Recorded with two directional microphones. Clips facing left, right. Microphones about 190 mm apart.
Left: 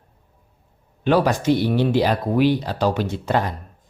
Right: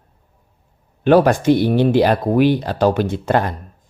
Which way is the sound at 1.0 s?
55° right (ahead or behind).